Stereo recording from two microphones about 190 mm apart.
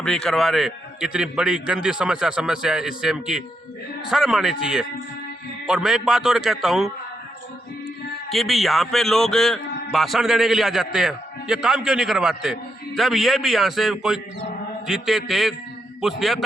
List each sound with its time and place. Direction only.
0.0 s a man's voice: 5° left (ahead or behind)
8.3 s a man's voice: centre (ahead or behind)